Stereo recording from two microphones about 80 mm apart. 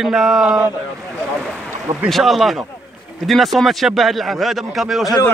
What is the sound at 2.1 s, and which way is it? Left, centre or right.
Speech, centre.